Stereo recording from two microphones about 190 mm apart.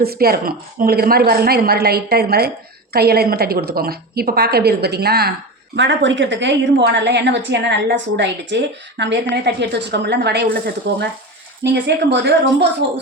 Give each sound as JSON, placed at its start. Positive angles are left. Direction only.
{"t": 0.0, "sound": "a woman's voice", "side_deg": -55}
{"t": 5.7, "sound": "a woman's voice", "side_deg": -70}
{"t": 10.9, "sound": "a woman's voice", "side_deg": -65}